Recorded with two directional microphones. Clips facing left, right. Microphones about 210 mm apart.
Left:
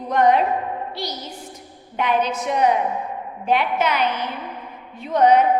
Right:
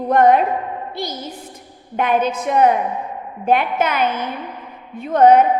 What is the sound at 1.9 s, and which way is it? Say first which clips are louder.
A woman's voice: right 3 dB; 50° right (ahead or behind).